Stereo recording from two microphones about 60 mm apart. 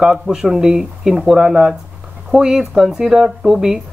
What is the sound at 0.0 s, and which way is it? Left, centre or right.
Speech, centre.